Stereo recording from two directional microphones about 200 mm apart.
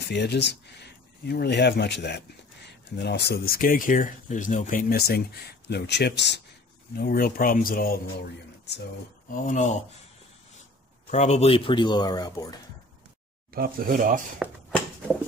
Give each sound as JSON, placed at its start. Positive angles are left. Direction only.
{"t": 0.0, "sound": "speech", "side_deg": 55}
{"t": 6.9, "sound": "speech", "side_deg": 50}
{"t": 9.3, "sound": "speech", "side_deg": 40}
{"t": 11.1, "sound": "a man's voice", "side_deg": 35}
{"t": 13.5, "sound": "speech", "side_deg": -45}